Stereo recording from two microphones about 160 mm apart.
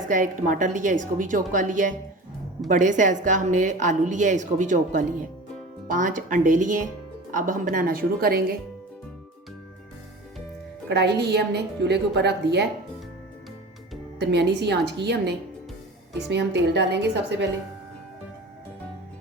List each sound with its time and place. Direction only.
0.1 s a woman's voice: 55° right (ahead or behind); by 8.5 s 70° right (ahead or behind)
10.8 s a woman's voice: 90° right
14.2 s a woman's voice: 90° right